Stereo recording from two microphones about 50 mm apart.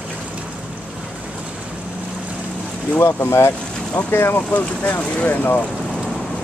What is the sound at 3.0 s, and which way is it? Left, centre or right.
Speech, left.